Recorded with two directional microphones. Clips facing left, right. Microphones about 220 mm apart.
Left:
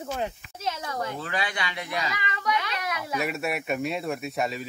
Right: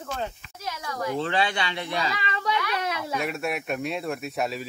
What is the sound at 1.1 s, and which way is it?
Speech, 30° right (ahead or behind).